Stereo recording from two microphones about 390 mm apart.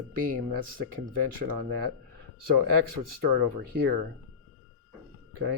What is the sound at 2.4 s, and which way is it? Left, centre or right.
Speech, right.